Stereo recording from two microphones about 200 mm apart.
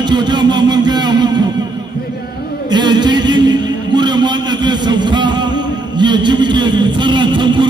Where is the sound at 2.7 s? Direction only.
20° right (ahead or behind).